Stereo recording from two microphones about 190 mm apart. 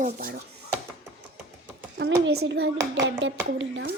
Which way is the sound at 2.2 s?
65° right (ahead or behind).